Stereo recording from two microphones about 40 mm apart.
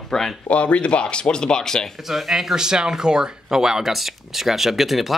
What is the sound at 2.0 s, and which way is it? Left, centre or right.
Speech, centre.